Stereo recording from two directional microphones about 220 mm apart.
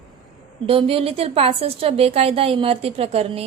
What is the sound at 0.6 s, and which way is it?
A woman's voice, 25° right (ahead or behind).